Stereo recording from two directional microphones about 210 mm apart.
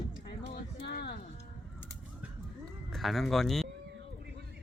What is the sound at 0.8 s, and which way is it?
Music, 50° left (ahead or behind).